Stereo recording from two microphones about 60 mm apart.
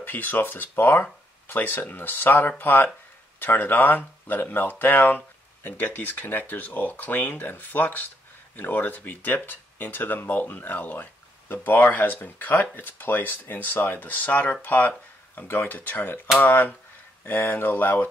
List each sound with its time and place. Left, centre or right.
0.0 s speech: left